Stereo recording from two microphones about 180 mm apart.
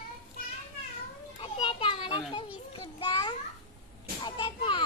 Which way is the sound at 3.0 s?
25° left (ahead or behind).